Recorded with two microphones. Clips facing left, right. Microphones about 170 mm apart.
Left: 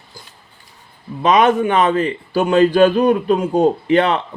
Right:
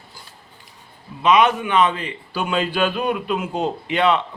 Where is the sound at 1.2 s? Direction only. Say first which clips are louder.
Left 3 dB; 45° left (ahead or behind).